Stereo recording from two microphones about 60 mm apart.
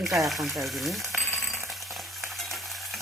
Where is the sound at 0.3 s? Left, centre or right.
Centre.